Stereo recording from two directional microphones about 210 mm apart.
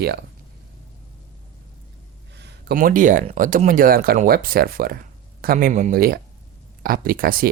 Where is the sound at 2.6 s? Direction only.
40° right (ahead or behind).